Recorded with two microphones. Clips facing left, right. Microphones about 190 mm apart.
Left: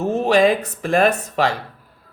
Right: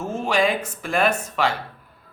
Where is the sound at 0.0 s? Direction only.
35° left (ahead or behind).